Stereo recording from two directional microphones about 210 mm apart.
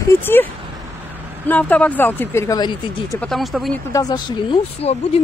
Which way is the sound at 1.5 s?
5° left (ahead or behind).